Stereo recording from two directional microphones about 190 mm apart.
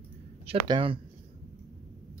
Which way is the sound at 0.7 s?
25° right (ahead or behind).